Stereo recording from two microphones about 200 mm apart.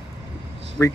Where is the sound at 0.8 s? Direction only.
10° left (ahead or behind).